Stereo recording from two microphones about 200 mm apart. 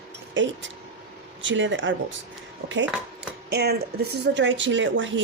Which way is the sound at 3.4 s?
55° right (ahead or behind).